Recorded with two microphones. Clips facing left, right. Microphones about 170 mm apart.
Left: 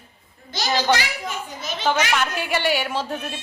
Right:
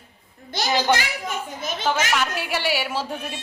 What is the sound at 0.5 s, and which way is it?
Speech, 55° right (ahead or behind).